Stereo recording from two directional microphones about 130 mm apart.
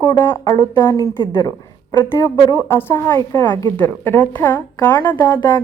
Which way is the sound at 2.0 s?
20° left (ahead or behind).